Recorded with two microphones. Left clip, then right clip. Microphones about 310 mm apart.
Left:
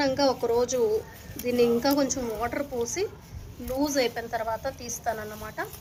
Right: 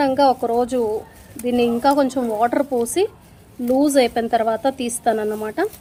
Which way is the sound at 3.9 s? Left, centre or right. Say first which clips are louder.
Right 9 dB; right.